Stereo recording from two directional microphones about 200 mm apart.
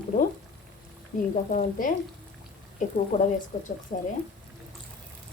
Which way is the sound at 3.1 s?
35° left (ahead or behind).